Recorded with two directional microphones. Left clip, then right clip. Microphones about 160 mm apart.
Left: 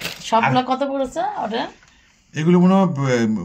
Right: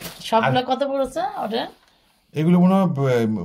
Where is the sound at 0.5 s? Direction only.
10° left (ahead or behind).